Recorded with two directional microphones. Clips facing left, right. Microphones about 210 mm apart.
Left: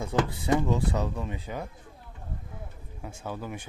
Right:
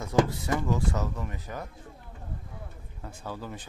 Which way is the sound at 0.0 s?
15° left (ahead or behind).